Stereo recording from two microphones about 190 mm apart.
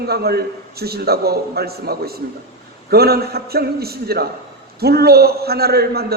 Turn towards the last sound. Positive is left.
turn(degrees=-55)  # may be behind; listen again after turning